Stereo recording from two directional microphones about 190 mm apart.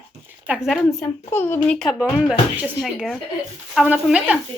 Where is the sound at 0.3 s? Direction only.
10° right (ahead or behind).